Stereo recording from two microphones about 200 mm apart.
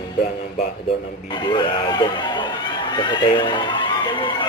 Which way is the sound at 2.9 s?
20° left (ahead or behind).